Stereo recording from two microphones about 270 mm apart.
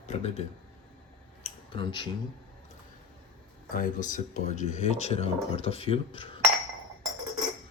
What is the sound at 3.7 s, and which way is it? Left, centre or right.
Speech, left.